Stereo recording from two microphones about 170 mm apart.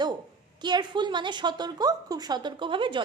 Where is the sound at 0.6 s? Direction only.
25° right (ahead or behind).